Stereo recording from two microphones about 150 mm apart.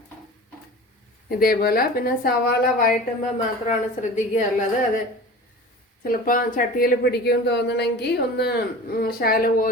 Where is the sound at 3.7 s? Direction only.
55° left (ahead or behind).